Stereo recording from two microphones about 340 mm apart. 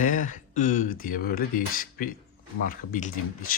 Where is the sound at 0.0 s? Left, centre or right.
Left.